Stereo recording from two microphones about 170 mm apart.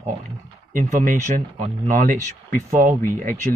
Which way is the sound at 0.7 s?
50° right (ahead or behind).